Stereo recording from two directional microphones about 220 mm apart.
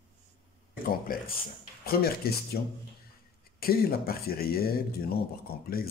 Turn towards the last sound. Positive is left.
turn(degrees=45)  # may be behind; listen again after turning